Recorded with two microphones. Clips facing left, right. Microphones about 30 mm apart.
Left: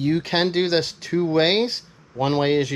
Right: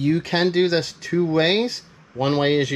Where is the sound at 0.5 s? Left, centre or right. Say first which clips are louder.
Right 1 dB; centre.